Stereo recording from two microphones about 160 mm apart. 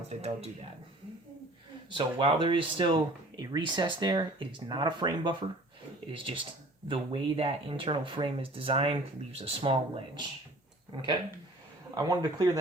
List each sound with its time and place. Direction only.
0.1 s speech: 40° right (ahead or behind)
1.9 s speech: 30° right (ahead or behind)